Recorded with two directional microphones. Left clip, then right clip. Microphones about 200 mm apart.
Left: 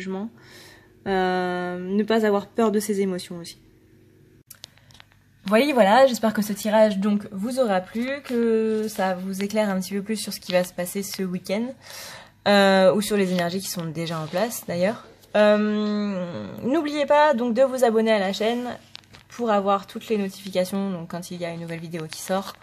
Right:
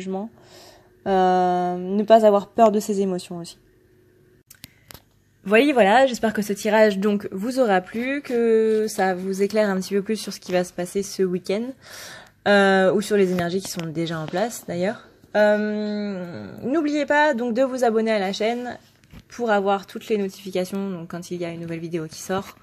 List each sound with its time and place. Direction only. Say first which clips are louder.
0.5 s speech: even; 15° right (ahead or behind)
5.5 s speech: right 2 dB; 15° right (ahead or behind); by 16.8 s 5° left (ahead or behind)
16.8 s speech: left 1 dB; 10° right (ahead or behind)